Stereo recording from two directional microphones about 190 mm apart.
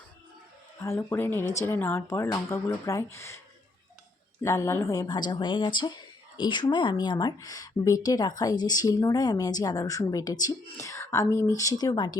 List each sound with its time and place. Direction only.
0.8 s speech: 15° left (ahead or behind)
4.4 s speech: 15° left (ahead or behind)